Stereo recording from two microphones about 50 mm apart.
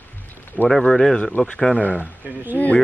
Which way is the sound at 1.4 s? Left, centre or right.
Left.